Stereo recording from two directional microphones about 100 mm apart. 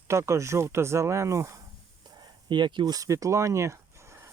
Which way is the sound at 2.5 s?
50° right (ahead or behind).